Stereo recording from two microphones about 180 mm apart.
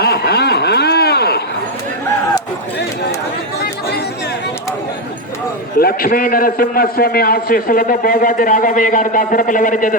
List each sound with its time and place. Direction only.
0.0 s a sound: 60° left (ahead or behind)
3.6 s chatter: 60° left (ahead or behind)
5.8 s a man's voice: 55° left (ahead or behind)